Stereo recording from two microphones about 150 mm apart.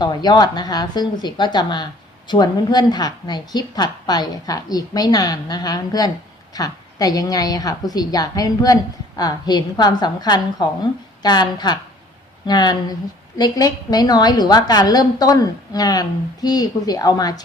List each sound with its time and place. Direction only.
0.0 s a woman's voice: 30° left (ahead or behind)